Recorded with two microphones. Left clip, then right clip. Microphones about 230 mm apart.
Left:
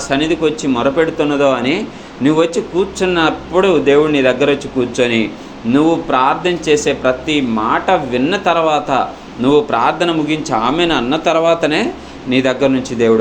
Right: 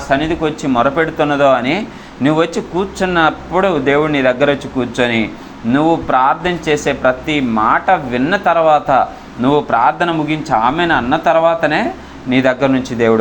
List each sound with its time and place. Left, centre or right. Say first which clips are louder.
0.1 s speech: even; right